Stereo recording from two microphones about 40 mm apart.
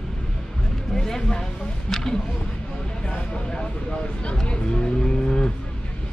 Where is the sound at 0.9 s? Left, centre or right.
Centre.